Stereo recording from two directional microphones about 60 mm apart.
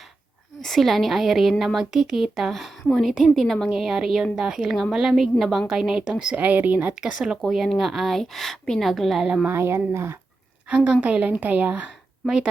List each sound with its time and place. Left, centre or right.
0.6 s a woman's voice: centre
6.4 s a woman's voice: right
7.0 s a woman's voice: centre
9.2 s a woman's voice: centre
9.5 s speech: right
10.7 s a woman's voice: right
12.2 s speech: centre